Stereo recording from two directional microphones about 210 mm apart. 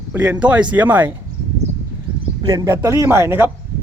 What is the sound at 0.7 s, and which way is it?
Speech, 10° right (ahead or behind).